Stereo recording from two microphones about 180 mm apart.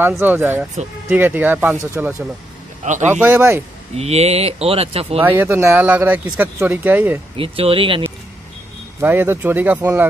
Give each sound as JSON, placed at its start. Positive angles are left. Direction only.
{"t": 0.2, "sound": "speech", "side_deg": -10}
{"t": 2.8, "sound": "speech", "side_deg": -40}
{"t": 3.1, "sound": "speech", "side_deg": -10}
{"t": 3.9, "sound": "speech", "side_deg": -35}
{"t": 5.2, "sound": "speech", "side_deg": -10}
{"t": 7.3, "sound": "speech", "side_deg": -30}
{"t": 9.0, "sound": "speech", "side_deg": -10}